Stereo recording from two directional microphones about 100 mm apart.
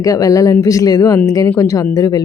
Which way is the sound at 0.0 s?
35° left (ahead or behind).